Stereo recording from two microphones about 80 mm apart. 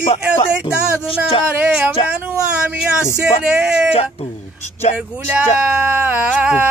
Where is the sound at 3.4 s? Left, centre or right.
Centre.